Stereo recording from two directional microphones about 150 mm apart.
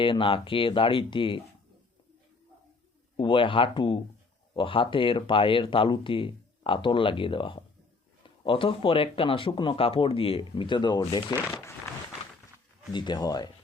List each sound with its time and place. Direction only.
0.0 s speech: 35° left (ahead or behind)
3.2 s speech: 35° left (ahead or behind)
12.9 s speech: 30° left (ahead or behind)